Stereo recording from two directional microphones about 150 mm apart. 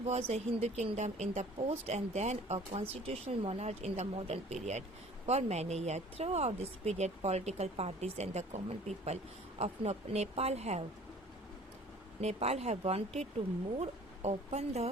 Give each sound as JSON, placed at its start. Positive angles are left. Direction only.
{"t": 0.0, "sound": "speech", "side_deg": -45}
{"t": 12.2, "sound": "speech", "side_deg": -45}